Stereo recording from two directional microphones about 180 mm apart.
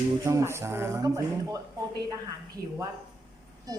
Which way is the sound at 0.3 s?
15° right (ahead or behind).